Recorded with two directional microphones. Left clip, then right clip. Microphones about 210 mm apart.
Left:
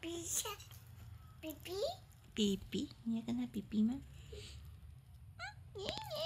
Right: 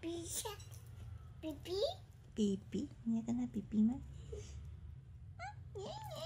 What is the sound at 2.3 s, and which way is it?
A woman's voice, 30° left (ahead or behind).